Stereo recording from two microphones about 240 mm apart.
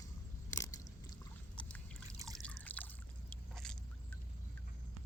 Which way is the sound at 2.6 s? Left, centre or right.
Centre.